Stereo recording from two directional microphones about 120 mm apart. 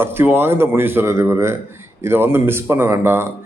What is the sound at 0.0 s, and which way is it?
A man's voice, 20° right (ahead or behind).